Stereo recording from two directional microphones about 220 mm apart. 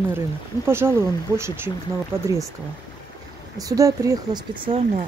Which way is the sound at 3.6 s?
15° right (ahead or behind).